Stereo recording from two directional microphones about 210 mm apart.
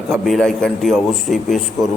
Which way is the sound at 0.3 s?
5° left (ahead or behind).